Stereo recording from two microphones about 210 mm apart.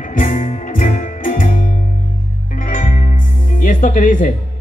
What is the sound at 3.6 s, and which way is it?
Music, 40° left (ahead or behind).